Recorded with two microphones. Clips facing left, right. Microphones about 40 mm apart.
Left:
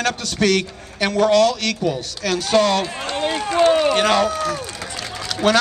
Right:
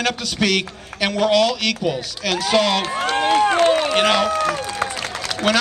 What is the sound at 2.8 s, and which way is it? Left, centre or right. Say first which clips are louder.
Speech: right 4 dB; right.